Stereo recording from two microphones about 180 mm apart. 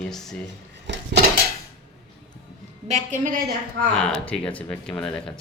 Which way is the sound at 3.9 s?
5° left (ahead or behind).